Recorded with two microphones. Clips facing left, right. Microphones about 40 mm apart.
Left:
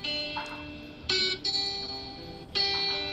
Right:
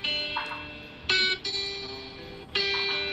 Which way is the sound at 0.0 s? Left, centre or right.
Right.